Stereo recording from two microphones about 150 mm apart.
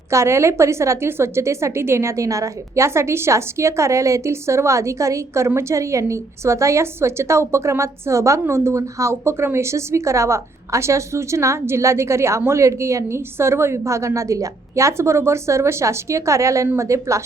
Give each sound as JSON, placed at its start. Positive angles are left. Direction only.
{"t": 0.1, "sound": "a woman's voice", "side_deg": -20}